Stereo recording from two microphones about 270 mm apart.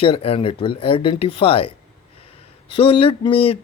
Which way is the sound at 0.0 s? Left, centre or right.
Centre.